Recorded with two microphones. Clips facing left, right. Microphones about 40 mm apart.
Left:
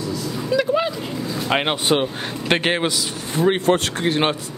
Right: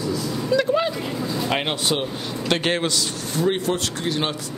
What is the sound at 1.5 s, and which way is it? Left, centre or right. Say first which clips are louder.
A man's voice: left 6 dB; left.